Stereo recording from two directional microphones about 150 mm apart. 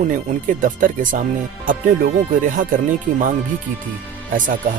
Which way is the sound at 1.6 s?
65° right (ahead or behind).